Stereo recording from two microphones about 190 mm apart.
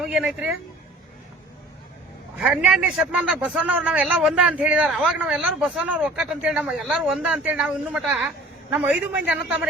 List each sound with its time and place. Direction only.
0.0 s a man's voice: 5° right (ahead or behind)
2.4 s a man's voice: centre (ahead or behind)